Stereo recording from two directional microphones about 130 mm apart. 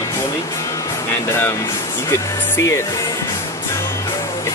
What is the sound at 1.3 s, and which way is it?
Speech, 15° left (ahead or behind).